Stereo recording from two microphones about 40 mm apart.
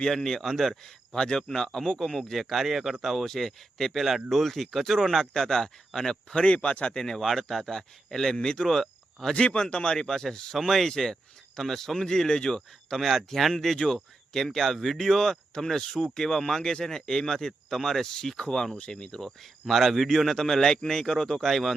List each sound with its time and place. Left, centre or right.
0.1 s a man's voice: centre
3.0 s a man's voice: centre
6.4 s speech: left
7.0 s a man's voice: centre
8.7 s cricket: centre
9.3 s speech: left
10.1 s a man's voice: centre
13.0 s speech: centre
13.7 s speech: centre
14.3 s a man's voice: centre